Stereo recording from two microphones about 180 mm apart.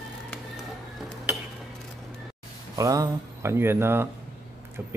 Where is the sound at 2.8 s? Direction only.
15° right (ahead or behind).